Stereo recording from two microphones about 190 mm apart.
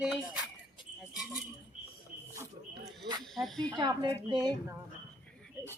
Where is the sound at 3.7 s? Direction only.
25° right (ahead or behind).